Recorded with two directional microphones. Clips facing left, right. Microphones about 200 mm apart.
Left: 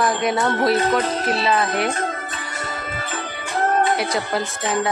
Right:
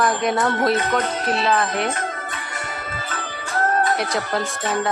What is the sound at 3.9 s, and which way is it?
Speech, 5° left (ahead or behind).